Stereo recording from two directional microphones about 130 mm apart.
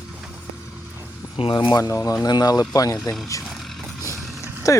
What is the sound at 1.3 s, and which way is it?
Speech, 45° left (ahead or behind).